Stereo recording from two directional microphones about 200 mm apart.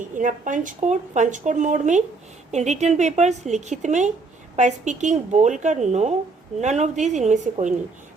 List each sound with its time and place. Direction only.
0.1 s a woman's voice: 40° right (ahead or behind)